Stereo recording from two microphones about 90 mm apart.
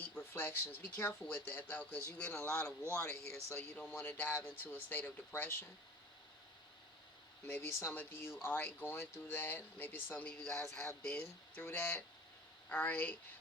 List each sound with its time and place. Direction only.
0.0 s speech: 25° left (ahead or behind)
7.8 s speech: 25° left (ahead or behind)
10.3 s speech: 10° left (ahead or behind)